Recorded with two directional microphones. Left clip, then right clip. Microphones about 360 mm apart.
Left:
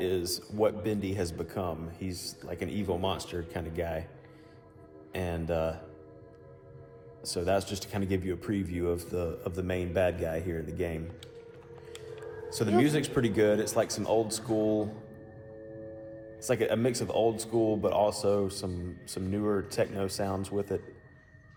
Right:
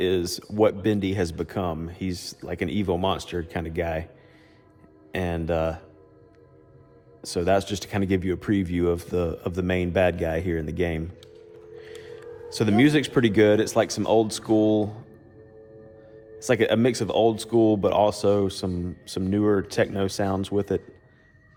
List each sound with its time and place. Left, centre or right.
0.0 s speech: right
5.1 s speech: right
7.2 s speech: right
12.5 s speech: right
16.4 s speech: right